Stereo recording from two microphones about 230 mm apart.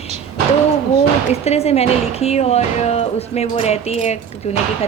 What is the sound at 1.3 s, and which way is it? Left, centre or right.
A woman's voice, left.